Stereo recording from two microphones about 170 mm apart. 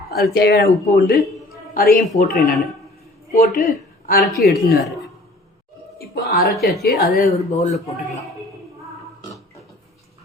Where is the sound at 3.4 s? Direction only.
55° left (ahead or behind).